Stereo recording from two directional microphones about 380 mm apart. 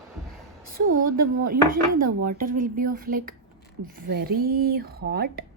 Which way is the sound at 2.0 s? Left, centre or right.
Right.